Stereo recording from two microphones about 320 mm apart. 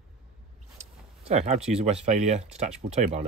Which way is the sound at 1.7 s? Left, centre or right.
Centre.